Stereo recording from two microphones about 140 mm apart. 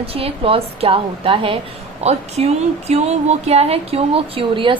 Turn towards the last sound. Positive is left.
turn(degrees=-35)  # may be behind; listen again after turning